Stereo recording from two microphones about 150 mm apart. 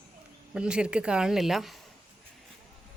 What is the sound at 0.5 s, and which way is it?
Speech, 5° right (ahead or behind).